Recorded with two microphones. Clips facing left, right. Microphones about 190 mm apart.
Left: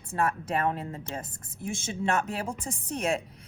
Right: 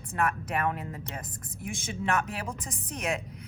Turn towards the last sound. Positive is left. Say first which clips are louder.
# left 3 dB
turn(degrees=30)  # may be behind; listen again after turning